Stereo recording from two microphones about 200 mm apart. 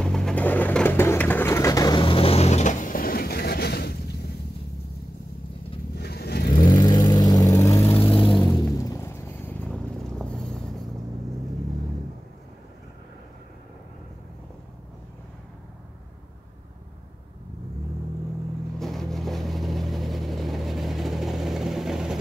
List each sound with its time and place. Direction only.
0.0 s pigeon: 5° left (ahead or behind); by 4.0 s 55° left (ahead or behind)
5.9 s vehicle: 55° left (ahead or behind)
6.7 s vehicle: 20° left (ahead or behind)
8.0 s vehicle: 25° left (ahead or behind); by 10.9 s centre (ahead or behind)
18.8 s vehicle: centre (ahead or behind)